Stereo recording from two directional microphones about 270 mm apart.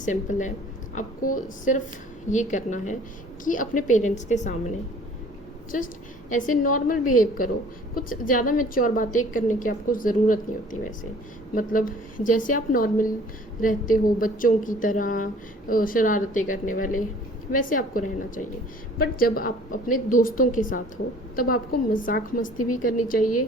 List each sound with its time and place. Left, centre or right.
0.0 s a woman's voice: left
6.3 s a woman's voice: left
23.2 s a woman's voice: left